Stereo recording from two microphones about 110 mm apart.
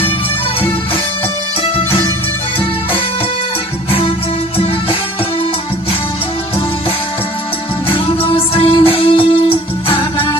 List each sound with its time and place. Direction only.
1.6 s music: 65° left (ahead or behind)
4.5 s music: 60° left (ahead or behind)
7.9 s music: 55° left (ahead or behind)